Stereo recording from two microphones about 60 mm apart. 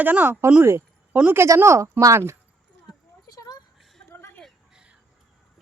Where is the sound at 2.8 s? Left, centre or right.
Left.